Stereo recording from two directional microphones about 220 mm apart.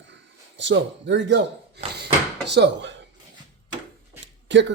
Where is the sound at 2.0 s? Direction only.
50° right (ahead or behind).